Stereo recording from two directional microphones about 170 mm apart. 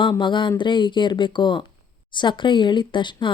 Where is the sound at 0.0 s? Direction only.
30° left (ahead or behind).